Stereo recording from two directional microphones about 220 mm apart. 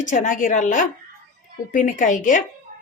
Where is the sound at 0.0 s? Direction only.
35° left (ahead or behind).